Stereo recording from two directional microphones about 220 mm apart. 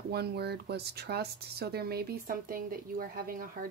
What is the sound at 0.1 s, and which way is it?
Speech, 45° right (ahead or behind).